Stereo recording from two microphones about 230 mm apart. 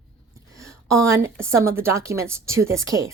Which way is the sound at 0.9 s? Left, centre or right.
Centre.